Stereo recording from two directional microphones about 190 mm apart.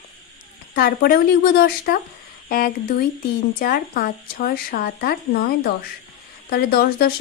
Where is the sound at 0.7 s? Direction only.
50° left (ahead or behind).